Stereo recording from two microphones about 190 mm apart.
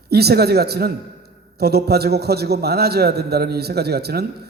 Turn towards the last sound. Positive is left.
turn(degrees=-55)  # may be behind; listen again after turning